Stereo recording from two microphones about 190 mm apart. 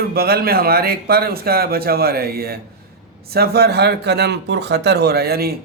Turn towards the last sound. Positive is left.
turn(degrees=-55)  # may be behind; listen again after turning